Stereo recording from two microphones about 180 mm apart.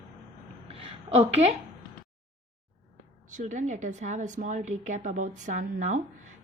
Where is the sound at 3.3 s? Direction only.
40° right (ahead or behind).